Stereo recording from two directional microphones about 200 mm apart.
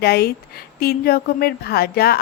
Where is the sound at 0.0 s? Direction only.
55° left (ahead or behind).